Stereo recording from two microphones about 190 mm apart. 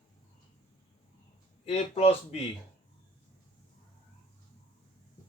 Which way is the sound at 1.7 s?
35° left (ahead or behind).